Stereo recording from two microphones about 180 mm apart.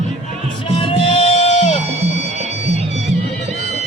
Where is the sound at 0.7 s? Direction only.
30° left (ahead or behind).